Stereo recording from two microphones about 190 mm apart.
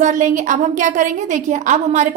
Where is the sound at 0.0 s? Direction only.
40° right (ahead or behind).